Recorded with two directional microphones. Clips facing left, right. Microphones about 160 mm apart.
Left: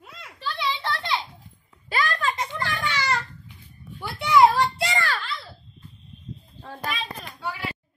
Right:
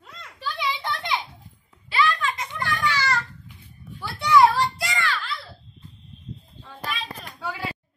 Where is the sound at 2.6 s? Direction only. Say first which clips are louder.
Right 4 dB; 20° left (ahead or behind).